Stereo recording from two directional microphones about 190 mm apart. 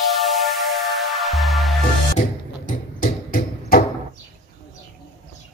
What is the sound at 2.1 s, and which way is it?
Music, 40° left (ahead or behind).